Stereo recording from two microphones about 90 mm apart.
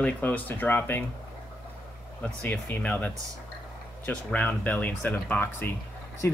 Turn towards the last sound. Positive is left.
turn(degrees=30)  # may be behind; listen again after turning